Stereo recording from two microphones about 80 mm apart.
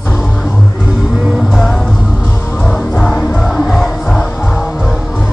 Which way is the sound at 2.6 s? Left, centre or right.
Centre.